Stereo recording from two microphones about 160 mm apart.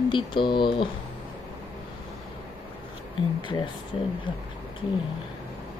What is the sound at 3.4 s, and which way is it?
Speech, 30° left (ahead or behind).